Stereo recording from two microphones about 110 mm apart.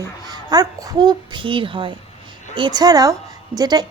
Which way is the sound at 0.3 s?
35° right (ahead or behind).